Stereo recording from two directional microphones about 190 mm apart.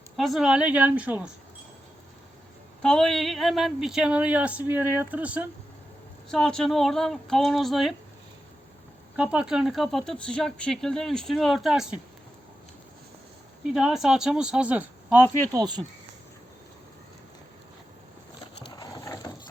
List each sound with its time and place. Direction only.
0.2 s a woman's voice: centre (ahead or behind)
2.8 s speech: centre (ahead or behind)
9.1 s speech: 5° right (ahead or behind)
13.7 s speech: 5° right (ahead or behind); by 15.8 s 20° right (ahead or behind)
18.7 s a sound: 20° left (ahead or behind)